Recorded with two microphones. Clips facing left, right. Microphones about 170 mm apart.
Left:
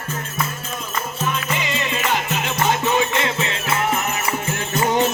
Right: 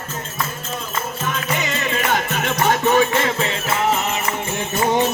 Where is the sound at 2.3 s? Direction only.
50° right (ahead or behind).